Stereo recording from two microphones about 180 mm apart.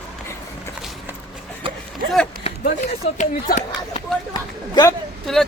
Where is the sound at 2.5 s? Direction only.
30° left (ahead or behind).